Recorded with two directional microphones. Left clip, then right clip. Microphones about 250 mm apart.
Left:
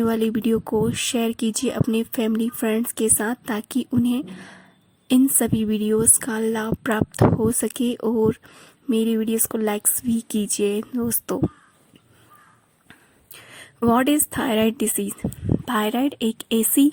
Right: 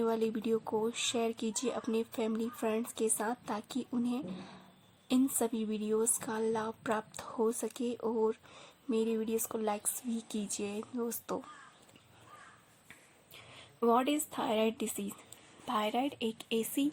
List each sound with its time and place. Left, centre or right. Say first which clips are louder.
0.0 s a woman's voice: left 10 dB; left
12.9 s a sound: left 8 dB; left
15.6 s a woman's voice: left 9 dB; left